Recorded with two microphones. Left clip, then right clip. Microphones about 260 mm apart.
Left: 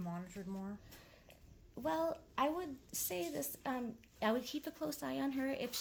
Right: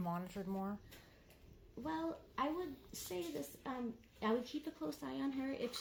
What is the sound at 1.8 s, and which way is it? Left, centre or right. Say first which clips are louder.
Speech: left 6 dB; left.